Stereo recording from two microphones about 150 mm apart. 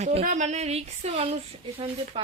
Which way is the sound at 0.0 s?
45° right (ahead or behind).